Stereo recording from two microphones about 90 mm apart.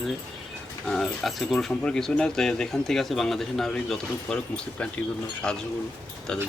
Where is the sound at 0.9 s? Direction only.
5° left (ahead or behind).